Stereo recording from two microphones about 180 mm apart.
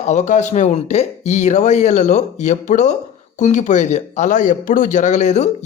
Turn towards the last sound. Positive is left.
turn(degrees=40)  # may be behind; listen again after turning